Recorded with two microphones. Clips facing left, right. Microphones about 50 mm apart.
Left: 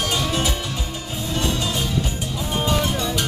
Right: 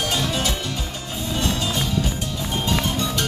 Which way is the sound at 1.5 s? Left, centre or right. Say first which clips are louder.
Even; centre.